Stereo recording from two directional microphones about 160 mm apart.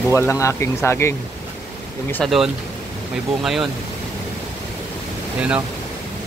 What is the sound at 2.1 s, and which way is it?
Speech, centre (ahead or behind).